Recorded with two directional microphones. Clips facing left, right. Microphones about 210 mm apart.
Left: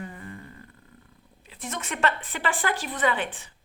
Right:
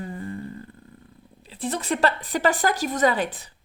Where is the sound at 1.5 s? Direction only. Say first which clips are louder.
Right 8 dB; 30° right (ahead or behind).